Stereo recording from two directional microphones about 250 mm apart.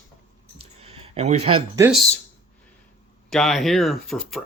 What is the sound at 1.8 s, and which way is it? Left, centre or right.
Speech, centre.